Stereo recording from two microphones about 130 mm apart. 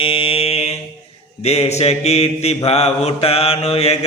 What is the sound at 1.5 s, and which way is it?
Mantra, 55° left (ahead or behind).